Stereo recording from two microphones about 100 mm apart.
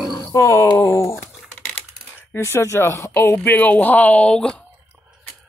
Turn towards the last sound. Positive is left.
turn(degrees=10)  # may be behind; listen again after turning